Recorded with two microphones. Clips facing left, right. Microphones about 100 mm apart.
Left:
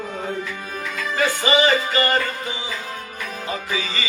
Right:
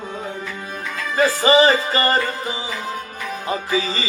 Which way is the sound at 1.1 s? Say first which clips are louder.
Right 5 dB; 35° right (ahead or behind).